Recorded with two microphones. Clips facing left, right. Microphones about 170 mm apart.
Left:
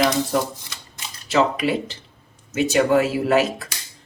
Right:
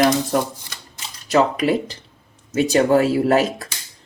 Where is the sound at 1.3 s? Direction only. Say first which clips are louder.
Right 2 dB; 40° right (ahead or behind).